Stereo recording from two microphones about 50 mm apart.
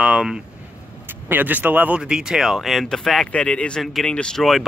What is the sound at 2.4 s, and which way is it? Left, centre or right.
Speech, centre.